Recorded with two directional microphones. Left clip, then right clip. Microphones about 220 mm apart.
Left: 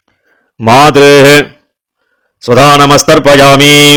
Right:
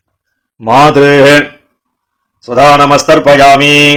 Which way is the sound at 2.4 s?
40° left (ahead or behind).